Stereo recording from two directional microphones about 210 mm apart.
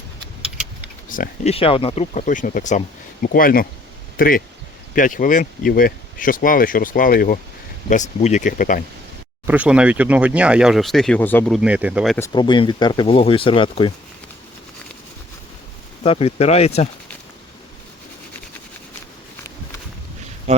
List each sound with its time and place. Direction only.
0.8 s a sound: 40° left (ahead or behind)
1.5 s speech: 25° left (ahead or behind)
9.5 s speech: 5° right (ahead or behind)
12.3 s speech: 20° left (ahead or behind)
16.0 s speech: 30° left (ahead or behind)